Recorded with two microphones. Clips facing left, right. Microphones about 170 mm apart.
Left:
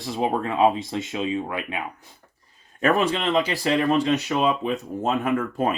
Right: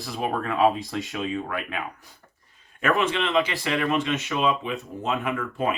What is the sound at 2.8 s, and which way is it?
Speech, 35° left (ahead or behind).